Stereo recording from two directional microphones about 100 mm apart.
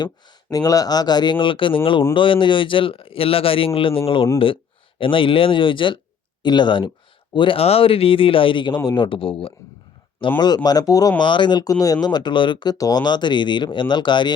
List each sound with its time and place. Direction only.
0.5 s speech: 40° left (ahead or behind); by 9.5 s 65° left (ahead or behind)
10.4 s speech: 45° left (ahead or behind)
11.2 s speech: 50° left (ahead or behind)
12.7 s speech: 40° left (ahead or behind)